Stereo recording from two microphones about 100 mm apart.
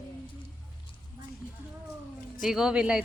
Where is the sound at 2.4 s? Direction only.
5° right (ahead or behind).